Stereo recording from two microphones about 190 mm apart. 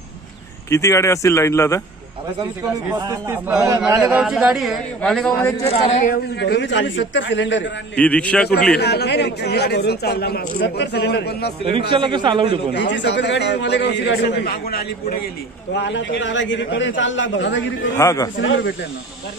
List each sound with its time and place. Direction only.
0.7 s speech: 15° left (ahead or behind)
2.9 s a man's voice: 15° right (ahead or behind); by 5.3 s 5° left (ahead or behind)
5.7 s a man's voice: 30° left (ahead or behind)
6.4 s a man's voice: 65° left (ahead or behind)
7.9 s speech: 5° left (ahead or behind)
8.7 s speech: 60° left (ahead or behind)
11.9 s a man's voice: 25° right (ahead or behind)
12.7 s speech: 70° left (ahead or behind)
15.7 s a man's voice: 70° left (ahead or behind)
17.9 s speech: 15° left (ahead or behind)
18.4 s speech: 85° left